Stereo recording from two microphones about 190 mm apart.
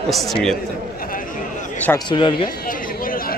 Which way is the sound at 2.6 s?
50° left (ahead or behind).